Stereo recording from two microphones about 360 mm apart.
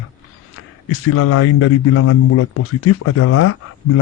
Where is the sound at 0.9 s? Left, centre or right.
Left.